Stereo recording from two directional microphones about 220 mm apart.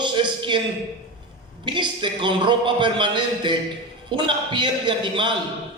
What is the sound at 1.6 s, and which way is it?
A man's voice, 20° right (ahead or behind).